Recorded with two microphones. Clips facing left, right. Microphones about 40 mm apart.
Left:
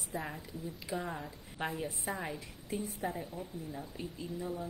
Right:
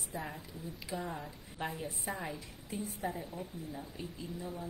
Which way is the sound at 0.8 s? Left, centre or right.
Centre.